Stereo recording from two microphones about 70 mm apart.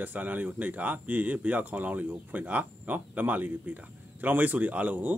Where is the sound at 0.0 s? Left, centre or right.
Right.